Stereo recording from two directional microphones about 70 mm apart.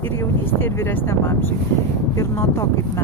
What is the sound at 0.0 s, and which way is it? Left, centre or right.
Speech, left.